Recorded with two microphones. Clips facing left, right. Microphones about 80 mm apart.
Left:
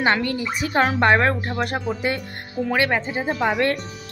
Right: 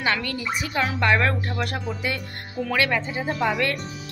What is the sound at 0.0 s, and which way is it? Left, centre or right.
Speech, left.